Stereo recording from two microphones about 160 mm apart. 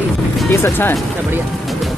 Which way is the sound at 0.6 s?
15° left (ahead or behind).